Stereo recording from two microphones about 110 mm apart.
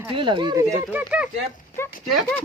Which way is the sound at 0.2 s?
45° right (ahead or behind).